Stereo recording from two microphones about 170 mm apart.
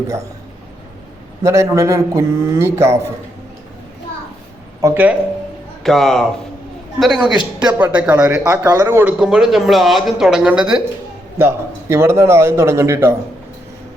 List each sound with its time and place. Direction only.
1.5 s a man's voice: 15° right (ahead or behind)
4.8 s a man's voice: 15° right (ahead or behind)
5.8 s a man's voice: centre (ahead or behind)
9.1 s speech: 5° right (ahead or behind)
11.3 s a man's voice: 15° right (ahead or behind)